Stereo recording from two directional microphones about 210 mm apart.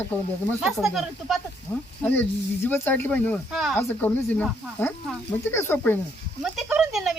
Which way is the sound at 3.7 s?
10° left (ahead or behind).